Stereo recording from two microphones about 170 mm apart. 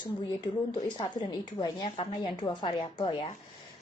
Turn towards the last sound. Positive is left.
turn(degrees=30)  # may be behind; listen again after turning